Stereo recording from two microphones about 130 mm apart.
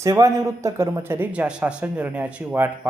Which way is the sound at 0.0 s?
25° right (ahead or behind).